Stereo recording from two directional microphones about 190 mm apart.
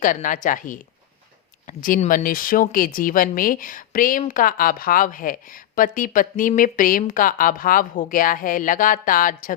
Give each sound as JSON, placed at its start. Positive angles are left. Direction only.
{"t": 0.0, "sound": "a woman's voice", "side_deg": 45}